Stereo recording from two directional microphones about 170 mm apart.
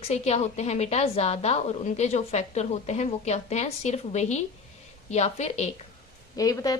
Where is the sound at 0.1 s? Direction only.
40° left (ahead or behind).